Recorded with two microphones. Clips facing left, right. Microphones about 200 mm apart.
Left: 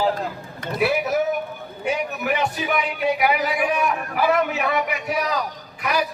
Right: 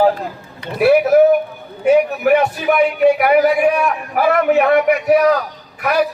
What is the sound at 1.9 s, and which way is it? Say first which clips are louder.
A man's voice: right 12 dB; 55° right (ahead or behind).